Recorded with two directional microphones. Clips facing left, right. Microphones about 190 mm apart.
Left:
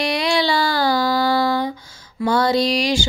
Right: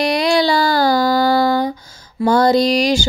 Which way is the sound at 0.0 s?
40° right (ahead or behind).